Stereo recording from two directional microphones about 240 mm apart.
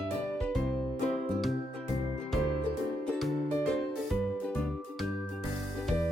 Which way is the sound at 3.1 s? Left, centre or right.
Centre.